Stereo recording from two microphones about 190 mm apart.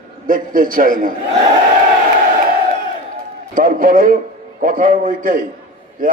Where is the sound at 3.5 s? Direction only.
45° right (ahead or behind).